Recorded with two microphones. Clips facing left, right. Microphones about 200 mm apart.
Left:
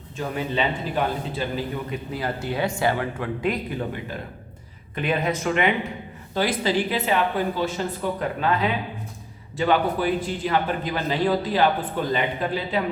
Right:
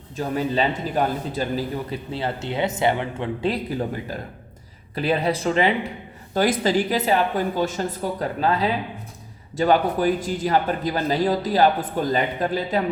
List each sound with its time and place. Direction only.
0.2 s a man's voice: 40° right (ahead or behind)
6.3 s a man's voice: 45° right (ahead or behind)